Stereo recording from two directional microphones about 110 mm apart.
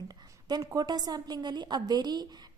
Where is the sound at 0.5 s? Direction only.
35° right (ahead or behind).